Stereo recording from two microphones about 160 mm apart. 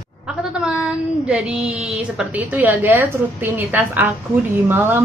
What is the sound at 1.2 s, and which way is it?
Speech, 5° right (ahead or behind).